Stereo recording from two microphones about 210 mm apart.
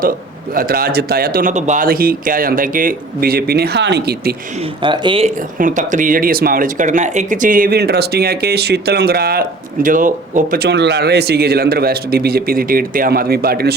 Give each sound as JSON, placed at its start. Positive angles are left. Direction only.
{"t": 0.5, "sound": "speech", "side_deg": -45}
{"t": 4.8, "sound": "speech", "side_deg": -25}
{"t": 5.5, "sound": "speech", "side_deg": -40}